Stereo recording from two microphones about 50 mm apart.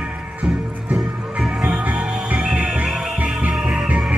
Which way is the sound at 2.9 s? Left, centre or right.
Centre.